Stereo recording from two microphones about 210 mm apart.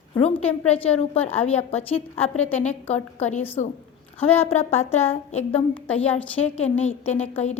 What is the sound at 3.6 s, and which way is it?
A woman's voice, 30° left (ahead or behind).